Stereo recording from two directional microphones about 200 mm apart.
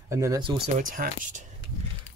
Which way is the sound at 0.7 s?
40° right (ahead or behind).